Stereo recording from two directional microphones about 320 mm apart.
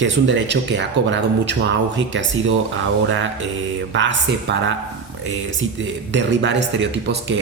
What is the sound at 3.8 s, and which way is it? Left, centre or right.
Speech, right.